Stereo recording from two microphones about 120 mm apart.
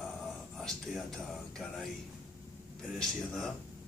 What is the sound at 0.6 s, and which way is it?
Speech, 5° left (ahead or behind).